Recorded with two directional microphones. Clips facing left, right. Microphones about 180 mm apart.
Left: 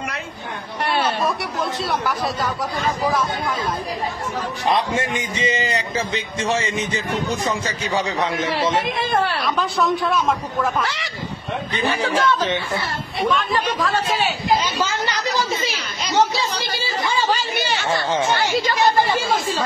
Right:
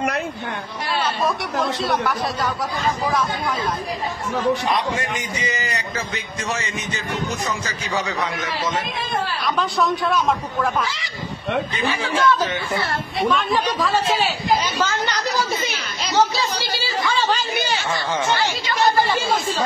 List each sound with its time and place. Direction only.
1.8 s speech: centre (ahead or behind)
4.6 s a man's voice: 25° left (ahead or behind)
8.8 s a woman's voice: 70° left (ahead or behind)
9.4 s speech: centre (ahead or behind)
12.0 s speech: 35° left (ahead or behind)
13.3 s a woman's voice: centre (ahead or behind)
17.0 s chatter: 10° left (ahead or behind)
17.8 s a man's voice: 20° left (ahead or behind)